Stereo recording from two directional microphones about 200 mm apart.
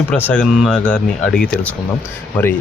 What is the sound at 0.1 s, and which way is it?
Speech, 5° left (ahead or behind).